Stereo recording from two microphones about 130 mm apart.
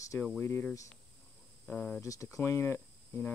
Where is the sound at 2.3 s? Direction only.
20° left (ahead or behind).